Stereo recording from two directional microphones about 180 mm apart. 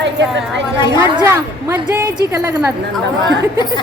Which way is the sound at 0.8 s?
25° left (ahead or behind).